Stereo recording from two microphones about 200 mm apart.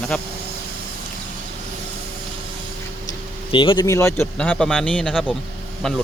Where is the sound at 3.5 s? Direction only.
25° left (ahead or behind).